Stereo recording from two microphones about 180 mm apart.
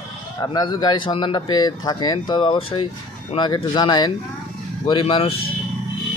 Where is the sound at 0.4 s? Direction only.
25° left (ahead or behind).